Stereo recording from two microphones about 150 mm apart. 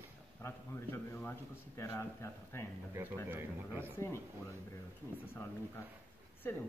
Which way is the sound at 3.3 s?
15° right (ahead or behind).